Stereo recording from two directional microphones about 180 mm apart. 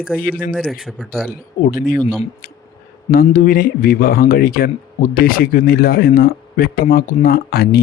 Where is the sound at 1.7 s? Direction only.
50° left (ahead or behind).